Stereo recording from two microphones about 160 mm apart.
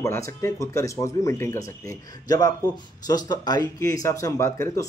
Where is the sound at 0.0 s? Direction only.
20° left (ahead or behind).